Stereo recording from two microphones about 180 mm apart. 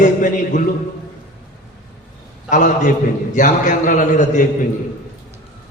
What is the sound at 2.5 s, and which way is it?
A man's voice, 45° left (ahead or behind).